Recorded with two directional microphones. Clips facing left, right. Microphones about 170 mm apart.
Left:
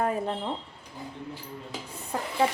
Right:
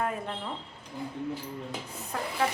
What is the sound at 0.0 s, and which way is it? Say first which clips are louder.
Speech: left 5 dB; 35° left (ahead or behind).